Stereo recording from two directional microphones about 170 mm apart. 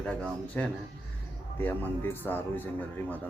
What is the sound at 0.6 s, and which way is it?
Speech, 10° left (ahead or behind).